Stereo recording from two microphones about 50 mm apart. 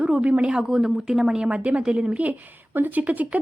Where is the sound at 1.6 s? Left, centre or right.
Right.